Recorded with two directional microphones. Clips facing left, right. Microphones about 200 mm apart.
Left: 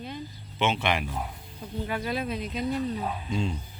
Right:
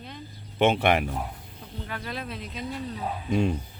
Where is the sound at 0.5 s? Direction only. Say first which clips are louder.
Right 5 dB; 50° right (ahead or behind).